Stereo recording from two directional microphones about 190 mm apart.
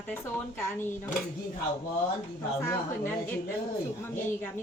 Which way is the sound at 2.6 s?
10° left (ahead or behind).